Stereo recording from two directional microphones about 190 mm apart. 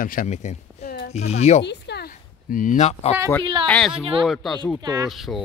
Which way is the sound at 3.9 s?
30° right (ahead or behind).